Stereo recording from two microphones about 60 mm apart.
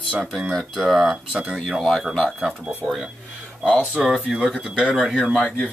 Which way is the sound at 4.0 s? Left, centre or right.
Centre.